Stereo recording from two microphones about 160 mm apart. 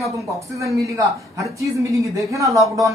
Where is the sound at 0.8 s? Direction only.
20° right (ahead or behind).